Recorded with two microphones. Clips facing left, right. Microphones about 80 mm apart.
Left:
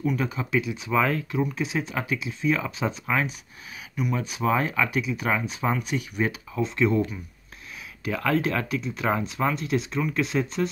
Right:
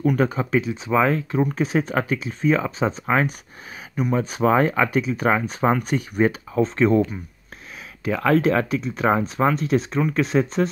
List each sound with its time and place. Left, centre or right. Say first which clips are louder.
0.0 s speech: right 6 dB; right
1.3 s speech: right 6 dB; right